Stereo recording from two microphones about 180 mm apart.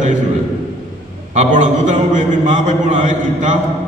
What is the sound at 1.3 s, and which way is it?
A man's voice, 45° right (ahead or behind).